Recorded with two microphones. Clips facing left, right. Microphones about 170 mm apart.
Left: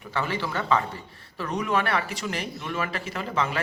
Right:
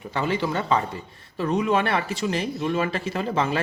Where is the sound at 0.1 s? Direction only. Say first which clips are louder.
Right 4 dB; 20° right (ahead or behind).